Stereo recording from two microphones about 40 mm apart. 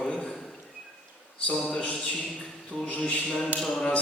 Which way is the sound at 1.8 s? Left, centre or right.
Left.